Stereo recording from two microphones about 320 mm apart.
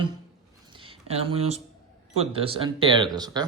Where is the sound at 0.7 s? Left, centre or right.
Centre.